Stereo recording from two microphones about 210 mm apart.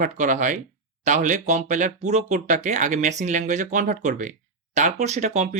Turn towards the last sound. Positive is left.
turn(degrees=-35)  # may be behind; listen again after turning